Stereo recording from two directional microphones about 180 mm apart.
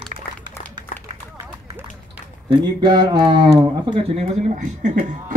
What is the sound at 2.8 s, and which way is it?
Speech, 25° right (ahead or behind).